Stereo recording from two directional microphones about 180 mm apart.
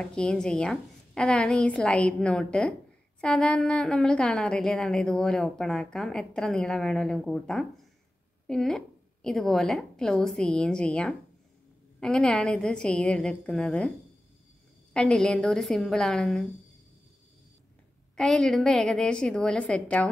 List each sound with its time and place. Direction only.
0.0 s a woman's voice: 5° left (ahead or behind)
15.0 s a woman's voice: 5° left (ahead or behind)
18.1 s a woman's voice: 5° left (ahead or behind)